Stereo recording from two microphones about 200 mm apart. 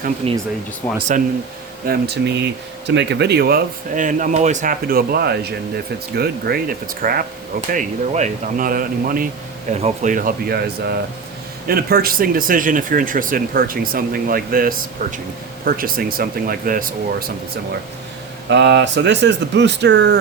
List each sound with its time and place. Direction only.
0.2 s speech: 30° right (ahead or behind)
1.9 s speech: 55° right (ahead or behind)
18.4 s speech: 60° right (ahead or behind)